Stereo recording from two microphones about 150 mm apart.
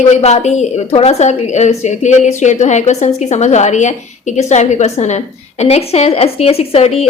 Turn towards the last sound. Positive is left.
turn(degrees=40)  # may be behind; listen again after turning